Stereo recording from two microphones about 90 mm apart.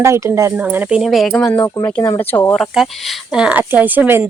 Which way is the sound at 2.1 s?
20° left (ahead or behind).